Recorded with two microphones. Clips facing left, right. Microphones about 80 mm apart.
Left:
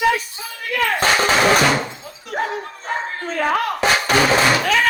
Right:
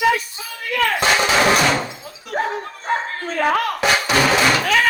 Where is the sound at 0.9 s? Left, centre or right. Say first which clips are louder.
Left 1 dB; left.